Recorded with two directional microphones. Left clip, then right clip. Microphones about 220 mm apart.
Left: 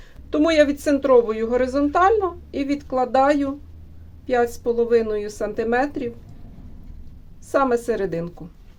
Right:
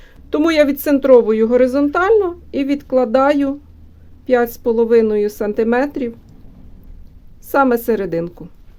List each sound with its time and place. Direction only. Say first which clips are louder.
0.3 s a woman's voice: right 3 dB; 50° right (ahead or behind)
7.4 s a woman's voice: right 5 dB; 50° right (ahead or behind)